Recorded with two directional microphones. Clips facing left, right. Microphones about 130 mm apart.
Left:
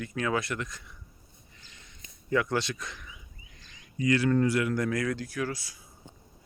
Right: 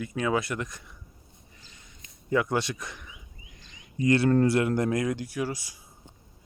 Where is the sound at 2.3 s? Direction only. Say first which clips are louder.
Right 2 dB; 20° right (ahead or behind).